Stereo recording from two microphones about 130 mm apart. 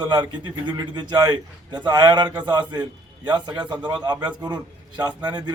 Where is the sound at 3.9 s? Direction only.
35° right (ahead or behind).